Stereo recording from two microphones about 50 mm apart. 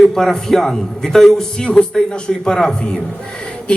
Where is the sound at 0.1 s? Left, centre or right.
Centre.